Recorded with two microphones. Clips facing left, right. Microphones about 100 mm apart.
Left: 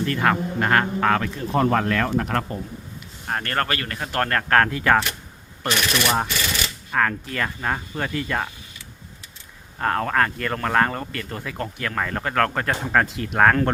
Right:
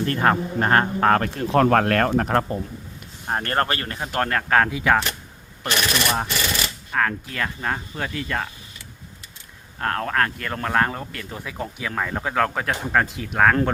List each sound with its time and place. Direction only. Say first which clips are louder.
0.0 s speech: right 1 dB; 35° right (ahead or behind)
1.3 s speech: right 3 dB; 80° right
1.7 s speech: right 3 dB; 65° right (ahead or behind); by 2.3 s 45° right (ahead or behind)
3.2 s speech: right 2 dB; 25° right (ahead or behind); by 5.0 s 5° right (ahead or behind)
5.6 s speech: left 1 dB; 5° left (ahead or behind)
9.7 s speech: left 2 dB; centre (ahead or behind)